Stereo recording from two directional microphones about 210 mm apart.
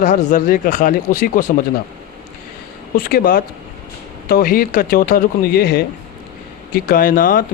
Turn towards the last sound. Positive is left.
turn(degrees=40)  # may be behind; listen again after turning